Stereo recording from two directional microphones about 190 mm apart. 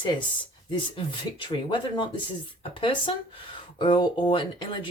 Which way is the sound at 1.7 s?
25° left (ahead or behind).